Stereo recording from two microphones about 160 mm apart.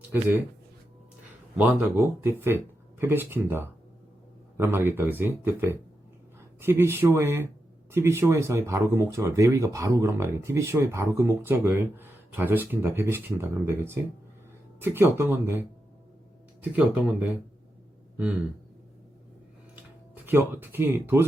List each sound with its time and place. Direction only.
0.1 s speech: 15° right (ahead or behind)
1.5 s speech: 10° right (ahead or behind)
20.2 s speech: 15° right (ahead or behind)